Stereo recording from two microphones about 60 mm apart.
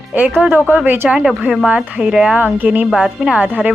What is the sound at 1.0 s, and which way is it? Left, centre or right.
Speech, centre.